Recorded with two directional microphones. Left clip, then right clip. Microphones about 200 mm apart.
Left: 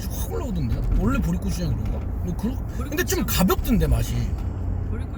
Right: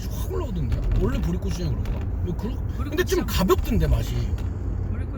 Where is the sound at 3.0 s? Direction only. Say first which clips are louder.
Even; 30° left (ahead or behind).